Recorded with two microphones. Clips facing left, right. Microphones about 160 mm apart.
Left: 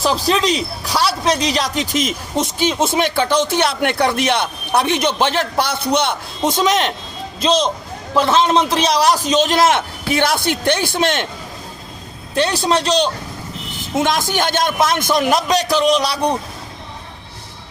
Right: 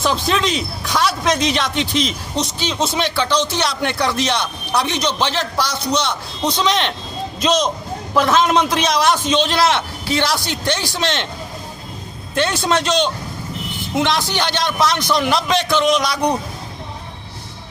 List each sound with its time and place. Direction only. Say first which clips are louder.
0.0 s a man's voice: left 2 dB; 35° left (ahead or behind)
7.4 s a man's voice: left 1 dB; 30° left (ahead or behind); by 11.3 s 50° left (ahead or behind)
12.3 s a man's voice: left 1 dB; 35° left (ahead or behind)
13.9 s speech: left 1 dB; 45° left (ahead or behind)